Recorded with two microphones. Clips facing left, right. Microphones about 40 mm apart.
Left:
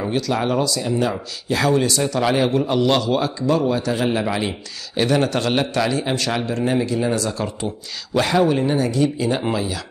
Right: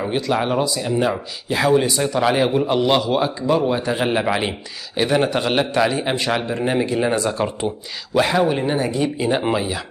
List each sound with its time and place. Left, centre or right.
0.1 s a man's voice: centre
8.1 s a man's voice: centre; by 9.8 s right